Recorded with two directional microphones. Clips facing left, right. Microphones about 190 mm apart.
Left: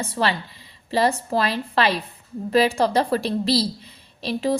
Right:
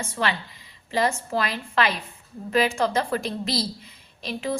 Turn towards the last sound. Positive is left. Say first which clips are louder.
# left 6 dB
turn(degrees=35)  # may be behind; listen again after turning